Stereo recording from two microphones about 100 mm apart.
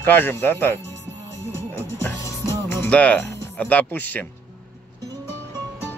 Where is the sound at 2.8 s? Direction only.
15° left (ahead or behind).